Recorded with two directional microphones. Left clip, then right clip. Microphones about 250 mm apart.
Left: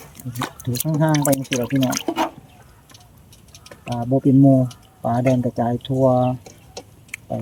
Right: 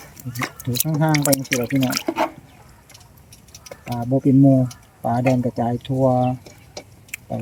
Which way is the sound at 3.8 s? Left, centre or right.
Centre.